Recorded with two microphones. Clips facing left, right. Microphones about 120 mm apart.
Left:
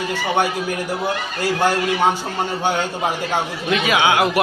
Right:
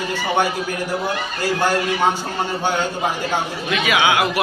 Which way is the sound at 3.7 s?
35° left (ahead or behind).